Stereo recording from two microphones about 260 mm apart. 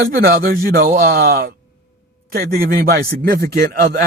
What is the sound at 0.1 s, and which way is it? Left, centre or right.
A man's voice, right.